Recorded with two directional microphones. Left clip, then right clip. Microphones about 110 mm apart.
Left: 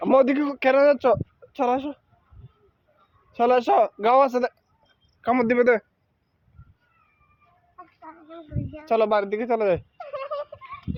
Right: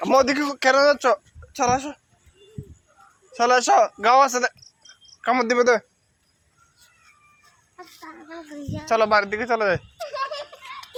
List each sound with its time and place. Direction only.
0.1 s a woman's voice: 50° left (ahead or behind)
3.3 s a woman's voice: 60° left (ahead or behind)
5.2 s speech: 50° left (ahead or behind)
8.9 s a woman's voice: 60° left (ahead or behind)